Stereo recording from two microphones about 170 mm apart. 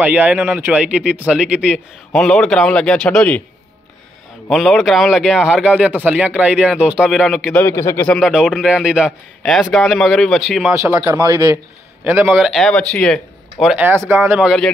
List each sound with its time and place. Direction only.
0.0 s a man's voice: 10° right (ahead or behind); by 3.4 s 5° left (ahead or behind)
4.5 s a man's voice: centre (ahead or behind)
7.5 s speech: 15° left (ahead or behind)
8.1 s a man's voice: 5° right (ahead or behind)
10.9 s a man's voice: 15° right (ahead or behind)
12.0 s a man's voice: 10° right (ahead or behind)